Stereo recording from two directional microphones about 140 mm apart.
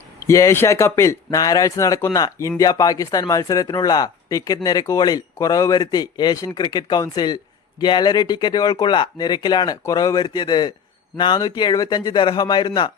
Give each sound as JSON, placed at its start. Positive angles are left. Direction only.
{"t": 0.3, "sound": "speech", "side_deg": 20}